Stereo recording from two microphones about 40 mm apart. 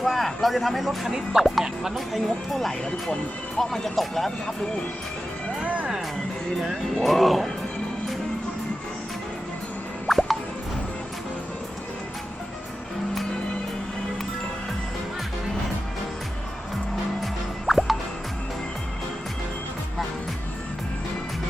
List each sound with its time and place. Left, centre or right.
0.0 s speech: centre
2.1 s speech: centre
5.6 s music: right
7.0 s speech: centre
10.1 s music: centre
17.7 s music: centre